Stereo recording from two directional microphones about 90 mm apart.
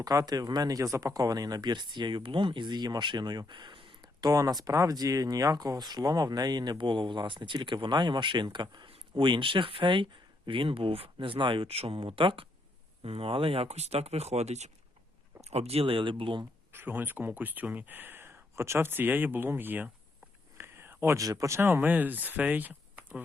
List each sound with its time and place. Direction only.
0.0 s speech: 45° right (ahead or behind); by 4.1 s 70° right (ahead or behind)
4.2 s speech: 45° right (ahead or behind)
8.9 s speech: 70° right (ahead or behind)
13.0 s speech: 90° right
15.3 s a sound: 20° right (ahead or behind)
15.7 s speech: 90° right; by 16.4 s 70° right (ahead or behind)
16.7 s speech: 20° right (ahead or behind)
20.6 s whispering: 25° right (ahead or behind)
21.2 s speech: 35° right (ahead or behind); by 23.2 s 15° right (ahead or behind)